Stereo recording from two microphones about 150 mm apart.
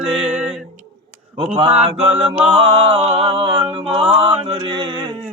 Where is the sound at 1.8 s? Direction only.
40° right (ahead or behind).